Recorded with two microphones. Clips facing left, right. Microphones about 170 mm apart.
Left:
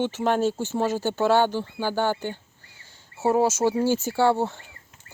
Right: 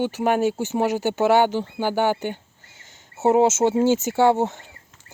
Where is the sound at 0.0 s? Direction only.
15° right (ahead or behind).